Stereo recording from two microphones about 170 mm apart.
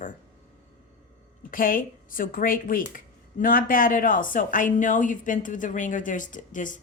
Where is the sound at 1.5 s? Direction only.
55° left (ahead or behind).